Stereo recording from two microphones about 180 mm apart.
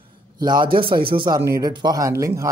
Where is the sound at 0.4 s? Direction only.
25° right (ahead or behind).